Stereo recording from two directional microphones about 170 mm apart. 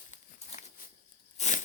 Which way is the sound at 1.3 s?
45° left (ahead or behind).